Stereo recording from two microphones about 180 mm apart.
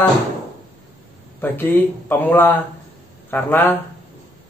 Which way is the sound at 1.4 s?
10° left (ahead or behind).